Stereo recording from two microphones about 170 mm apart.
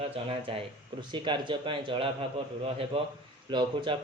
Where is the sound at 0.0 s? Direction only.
35° right (ahead or behind).